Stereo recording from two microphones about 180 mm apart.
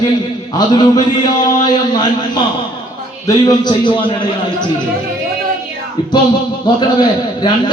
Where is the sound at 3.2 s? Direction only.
20° left (ahead or behind).